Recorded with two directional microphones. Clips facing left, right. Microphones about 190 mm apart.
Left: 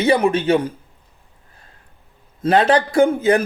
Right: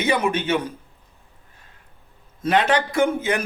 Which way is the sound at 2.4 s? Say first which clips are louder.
Left 4 dB; 35° left (ahead or behind).